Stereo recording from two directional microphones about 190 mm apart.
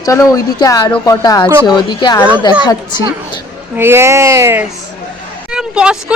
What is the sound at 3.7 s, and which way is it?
Speech, 10° right (ahead or behind).